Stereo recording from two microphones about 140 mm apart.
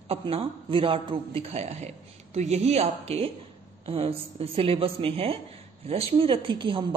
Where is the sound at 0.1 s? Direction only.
40° right (ahead or behind).